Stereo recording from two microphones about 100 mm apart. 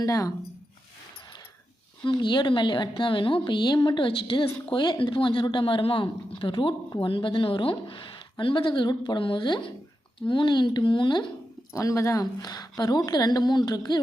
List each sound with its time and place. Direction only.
0.0 s a woman's voice: 35° left (ahead or behind)
2.0 s a woman's voice: 50° left (ahead or behind)
11.7 s a woman's voice: 35° left (ahead or behind)